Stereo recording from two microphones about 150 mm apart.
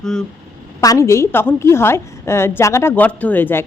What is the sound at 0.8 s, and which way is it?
A woman's voice, 20° left (ahead or behind).